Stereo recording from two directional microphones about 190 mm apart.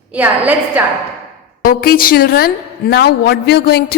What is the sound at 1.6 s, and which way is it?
A woman's voice, 50° left (ahead or behind).